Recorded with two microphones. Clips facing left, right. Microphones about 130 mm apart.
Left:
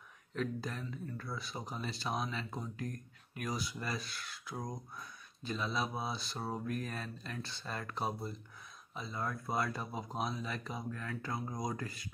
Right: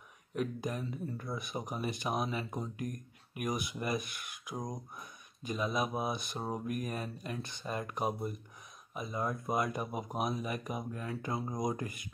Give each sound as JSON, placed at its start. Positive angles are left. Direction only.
{"t": 0.3, "sound": "speech", "side_deg": -15}